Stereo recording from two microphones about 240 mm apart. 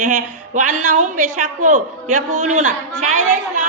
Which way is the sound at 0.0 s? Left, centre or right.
Right.